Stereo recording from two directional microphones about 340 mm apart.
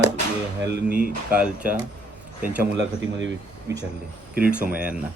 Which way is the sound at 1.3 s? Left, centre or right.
Centre.